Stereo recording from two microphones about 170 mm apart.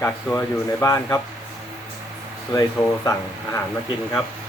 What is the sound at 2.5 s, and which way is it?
Speech, 20° left (ahead or behind).